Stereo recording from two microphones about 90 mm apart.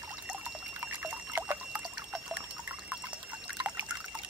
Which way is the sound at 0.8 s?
20° right (ahead or behind).